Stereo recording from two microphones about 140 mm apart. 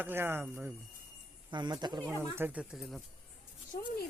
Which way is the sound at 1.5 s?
30° right (ahead or behind).